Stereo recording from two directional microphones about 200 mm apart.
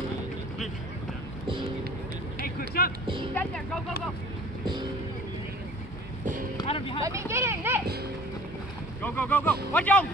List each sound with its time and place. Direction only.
2.8 s music: 50° left (ahead or behind)
3.3 s speech: 5° left (ahead or behind)
6.6 s a sound: 25° left (ahead or behind)
7.0 s speech: 15° right (ahead or behind)
9.0 s speech: 10° left (ahead or behind)